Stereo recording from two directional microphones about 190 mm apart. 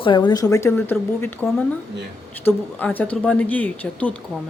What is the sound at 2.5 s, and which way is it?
Speech, 10° left (ahead or behind).